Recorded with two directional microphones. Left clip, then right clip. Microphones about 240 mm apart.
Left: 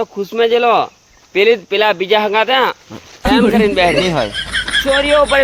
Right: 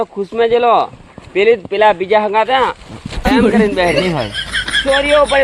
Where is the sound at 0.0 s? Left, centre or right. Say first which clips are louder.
Even; left.